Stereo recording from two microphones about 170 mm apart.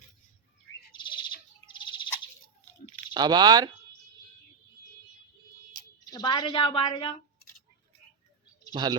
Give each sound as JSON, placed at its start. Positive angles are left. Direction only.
{"t": 0.9, "sound": "bird", "side_deg": 25}
{"t": 3.1, "sound": "speech", "side_deg": -25}
{"t": 6.1, "sound": "a woman's voice", "side_deg": 25}
{"t": 8.7, "sound": "speech", "side_deg": -25}